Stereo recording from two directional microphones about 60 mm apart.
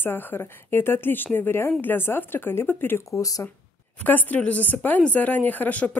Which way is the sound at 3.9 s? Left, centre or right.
Left.